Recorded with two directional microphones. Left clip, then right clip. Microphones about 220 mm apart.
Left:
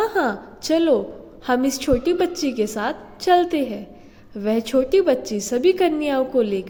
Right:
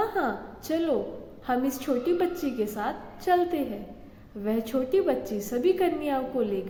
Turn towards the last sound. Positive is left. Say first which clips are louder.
# left 8 dB
turn(degrees=45)  # may be behind; listen again after turning